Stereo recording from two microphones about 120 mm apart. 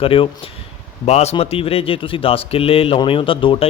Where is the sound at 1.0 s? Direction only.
60° left (ahead or behind).